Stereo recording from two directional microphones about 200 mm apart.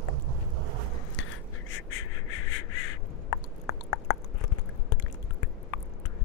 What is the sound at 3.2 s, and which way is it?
Chewing, 90° left.